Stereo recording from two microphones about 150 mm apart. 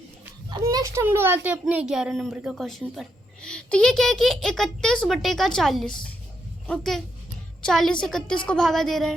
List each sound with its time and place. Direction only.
0.5 s a child's voice: 25° right (ahead or behind); by 9.1 s centre (ahead or behind)